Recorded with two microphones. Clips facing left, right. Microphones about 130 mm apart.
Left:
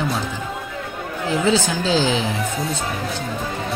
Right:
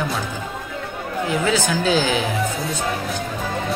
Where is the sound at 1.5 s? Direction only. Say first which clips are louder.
Left 1 dB; 25° left (ahead or behind).